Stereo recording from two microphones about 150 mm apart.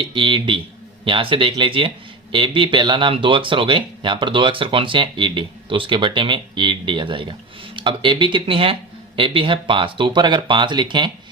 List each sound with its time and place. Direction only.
0.0 s speech: 35° right (ahead or behind)